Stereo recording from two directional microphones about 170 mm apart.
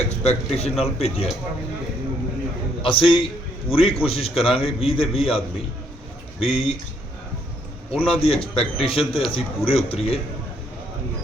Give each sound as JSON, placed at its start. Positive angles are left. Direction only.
{"t": 0.0, "sound": "a man's voice", "side_deg": 40}
{"t": 2.8, "sound": "a man's voice", "side_deg": 30}
{"t": 6.4, "sound": "a man's voice", "side_deg": 35}
{"t": 7.9, "sound": "a man's voice", "side_deg": 35}